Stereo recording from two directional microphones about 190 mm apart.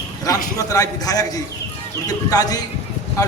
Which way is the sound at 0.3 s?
20° left (ahead or behind).